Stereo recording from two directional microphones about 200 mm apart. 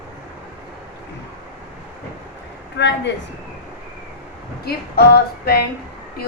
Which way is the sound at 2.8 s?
60° left (ahead or behind).